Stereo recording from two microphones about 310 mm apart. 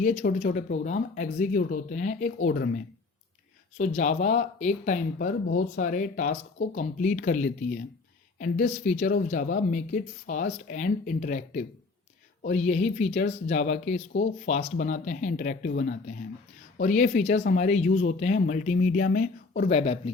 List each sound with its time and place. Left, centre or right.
0.0 s speech: left